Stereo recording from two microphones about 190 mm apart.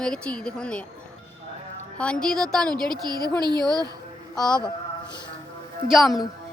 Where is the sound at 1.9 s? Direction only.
5° left (ahead or behind).